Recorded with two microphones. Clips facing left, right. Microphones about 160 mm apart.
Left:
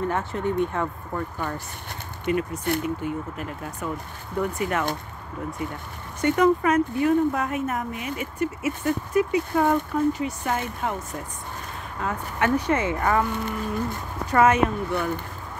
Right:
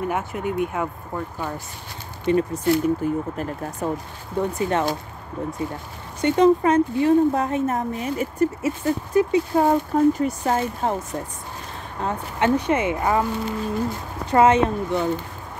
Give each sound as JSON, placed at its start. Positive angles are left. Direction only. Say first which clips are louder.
{"t": 0.0, "sound": "speech", "louder": "even", "side_deg": -10}
{"t": 2.3, "sound": "speech", "louder": "right 5 dB", "side_deg": -30}
{"t": 4.4, "sound": "speech", "louder": "right 3 dB", "side_deg": -30}
{"t": 6.2, "sound": "speech", "louder": "right 3 dB", "side_deg": -25}
{"t": 9.5, "sound": "speech", "louder": "right 3 dB", "side_deg": -20}
{"t": 9.9, "sound": "speech", "louder": "right 5 dB", "side_deg": -45}
{"t": 12.0, "sound": "speech", "louder": "right 3 dB", "side_deg": -25}
{"t": 13.3, "sound": "speech", "louder": "right 2 dB", "side_deg": 20}
{"t": 14.2, "sound": "speech", "louder": "right 3 dB", "side_deg": -25}